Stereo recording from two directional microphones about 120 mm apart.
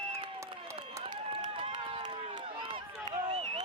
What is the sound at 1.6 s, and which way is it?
Run, 45° right (ahead or behind).